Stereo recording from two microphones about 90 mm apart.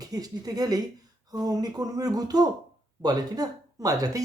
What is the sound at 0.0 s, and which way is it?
Speech, 45° right (ahead or behind).